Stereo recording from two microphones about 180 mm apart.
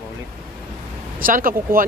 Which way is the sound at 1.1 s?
50° right (ahead or behind).